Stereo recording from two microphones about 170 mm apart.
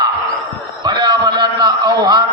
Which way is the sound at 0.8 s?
25° right (ahead or behind).